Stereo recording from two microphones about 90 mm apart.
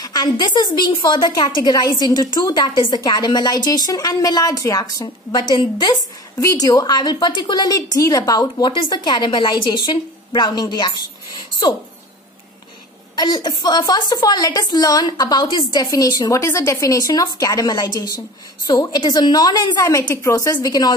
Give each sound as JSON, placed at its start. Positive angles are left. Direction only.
{"t": 0.0, "sound": "a woman's voice", "side_deg": 50}
{"t": 6.4, "sound": "a woman's voice", "side_deg": 45}
{"t": 13.1, "sound": "a woman's voice", "side_deg": 55}
{"t": 20.5, "sound": "a woman's voice", "side_deg": 50}